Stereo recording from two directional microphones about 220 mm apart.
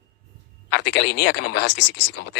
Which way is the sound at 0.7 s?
50° left (ahead or behind).